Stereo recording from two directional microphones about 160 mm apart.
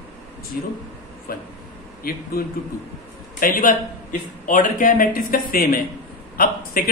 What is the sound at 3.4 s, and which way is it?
A man's voice, 60° left (ahead or behind).